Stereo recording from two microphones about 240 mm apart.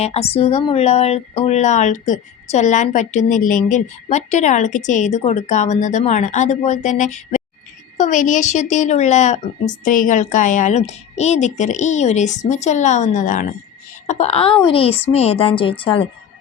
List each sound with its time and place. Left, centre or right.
0.0 s speech: left